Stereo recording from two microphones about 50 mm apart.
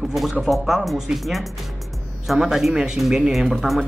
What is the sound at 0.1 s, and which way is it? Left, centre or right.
A man's voice, centre.